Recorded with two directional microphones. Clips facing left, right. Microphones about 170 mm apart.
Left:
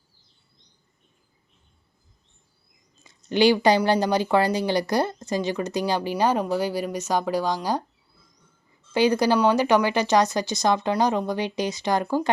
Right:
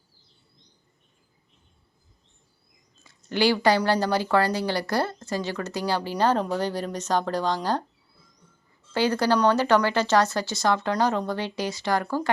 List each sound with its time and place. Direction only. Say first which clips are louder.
3.0 s speech: left 4 dB; 20° left (ahead or behind)
8.9 s speech: left 3 dB; 15° left (ahead or behind)